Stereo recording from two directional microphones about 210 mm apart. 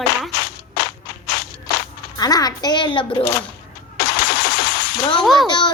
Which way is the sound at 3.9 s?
50° left (ahead or behind).